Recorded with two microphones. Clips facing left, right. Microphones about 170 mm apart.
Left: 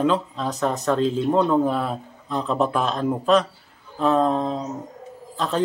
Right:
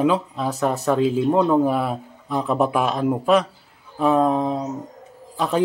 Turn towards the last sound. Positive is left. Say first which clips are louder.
# right 3 dB
turn(degrees=-10)  # may be behind; listen again after turning